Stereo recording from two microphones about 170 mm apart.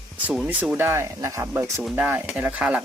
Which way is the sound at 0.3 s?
10° right (ahead or behind).